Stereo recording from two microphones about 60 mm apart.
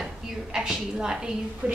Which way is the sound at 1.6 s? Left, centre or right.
Right.